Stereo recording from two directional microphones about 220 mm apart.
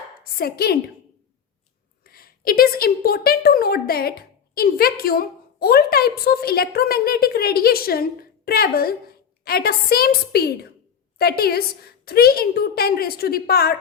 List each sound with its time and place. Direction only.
0.3 s a woman's voice: 45° left (ahead or behind)
2.0 s a woman's voice: 40° left (ahead or behind)